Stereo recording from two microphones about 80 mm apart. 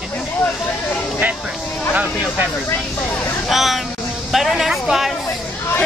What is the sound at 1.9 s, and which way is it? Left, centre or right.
Speech, centre.